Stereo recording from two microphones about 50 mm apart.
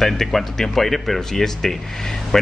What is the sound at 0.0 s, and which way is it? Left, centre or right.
A man's voice, centre.